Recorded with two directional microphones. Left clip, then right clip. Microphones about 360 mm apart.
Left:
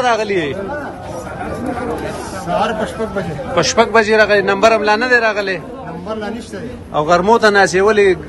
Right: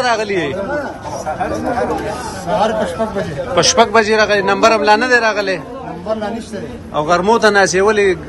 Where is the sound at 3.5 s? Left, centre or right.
Centre.